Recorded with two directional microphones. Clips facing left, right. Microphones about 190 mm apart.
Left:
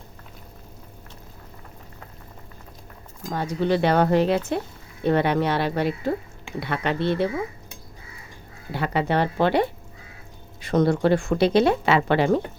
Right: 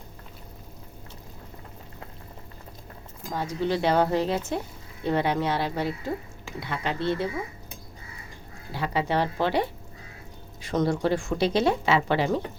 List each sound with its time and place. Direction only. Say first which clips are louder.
3.3 s speech: left 4 dB; 60° left (ahead or behind)
8.7 s speech: left 3 dB; 60° left (ahead or behind)